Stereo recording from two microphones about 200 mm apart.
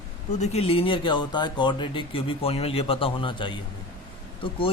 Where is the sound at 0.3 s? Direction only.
35° left (ahead or behind).